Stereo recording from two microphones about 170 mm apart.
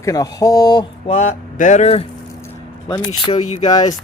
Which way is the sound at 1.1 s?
45° left (ahead or behind).